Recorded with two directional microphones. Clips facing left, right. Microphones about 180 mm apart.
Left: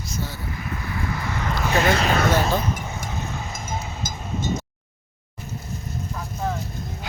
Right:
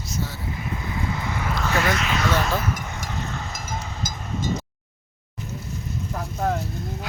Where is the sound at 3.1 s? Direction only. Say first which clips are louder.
Right 2 dB; 15° left (ahead or behind).